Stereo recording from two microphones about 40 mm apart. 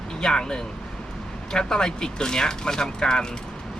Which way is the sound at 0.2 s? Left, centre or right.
Centre.